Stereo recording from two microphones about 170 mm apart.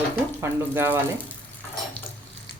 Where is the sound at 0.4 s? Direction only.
15° right (ahead or behind).